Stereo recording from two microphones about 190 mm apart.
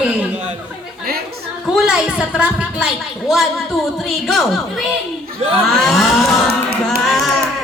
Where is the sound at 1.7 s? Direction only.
5° right (ahead or behind).